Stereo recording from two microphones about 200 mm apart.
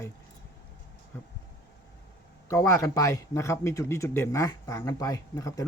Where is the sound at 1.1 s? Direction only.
10° left (ahead or behind).